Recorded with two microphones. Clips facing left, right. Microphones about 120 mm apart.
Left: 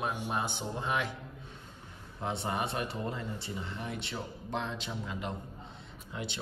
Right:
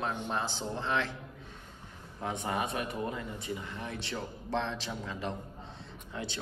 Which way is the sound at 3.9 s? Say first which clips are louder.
Right 1 dB; 15° left (ahead or behind).